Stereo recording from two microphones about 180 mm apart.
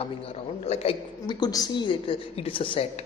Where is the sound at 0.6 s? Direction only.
35° left (ahead or behind).